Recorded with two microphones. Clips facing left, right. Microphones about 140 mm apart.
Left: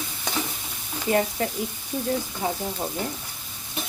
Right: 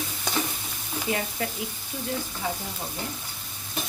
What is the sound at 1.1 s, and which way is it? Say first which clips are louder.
Speech: left 7 dB; 45° left (ahead or behind).